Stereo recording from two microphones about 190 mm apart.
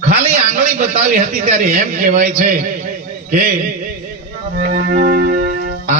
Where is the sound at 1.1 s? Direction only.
45° right (ahead or behind).